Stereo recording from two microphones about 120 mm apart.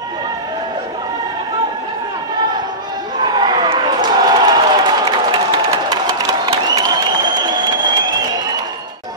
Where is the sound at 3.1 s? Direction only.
40° right (ahead or behind).